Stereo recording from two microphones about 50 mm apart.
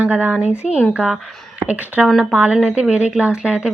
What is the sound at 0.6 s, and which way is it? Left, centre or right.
Speech, centre.